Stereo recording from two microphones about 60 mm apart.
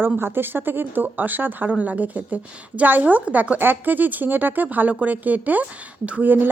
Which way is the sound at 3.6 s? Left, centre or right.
Right.